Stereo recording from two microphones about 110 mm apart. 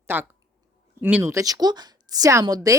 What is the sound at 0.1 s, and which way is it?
A woman's voice, 15° right (ahead or behind).